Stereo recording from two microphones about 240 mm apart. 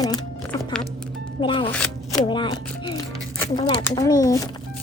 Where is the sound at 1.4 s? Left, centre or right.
Left.